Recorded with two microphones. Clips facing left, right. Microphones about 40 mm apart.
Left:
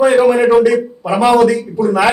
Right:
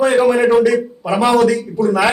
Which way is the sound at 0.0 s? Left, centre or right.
Centre.